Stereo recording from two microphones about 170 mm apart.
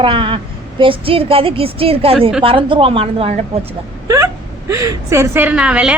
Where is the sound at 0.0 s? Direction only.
30° right (ahead or behind).